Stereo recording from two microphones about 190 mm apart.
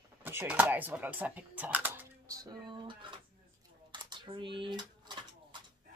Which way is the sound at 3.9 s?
25° right (ahead or behind).